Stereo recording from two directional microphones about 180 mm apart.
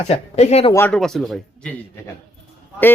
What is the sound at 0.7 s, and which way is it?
Speech, 15° left (ahead or behind).